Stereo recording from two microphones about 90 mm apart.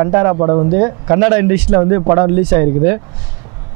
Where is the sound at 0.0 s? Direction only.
25° right (ahead or behind).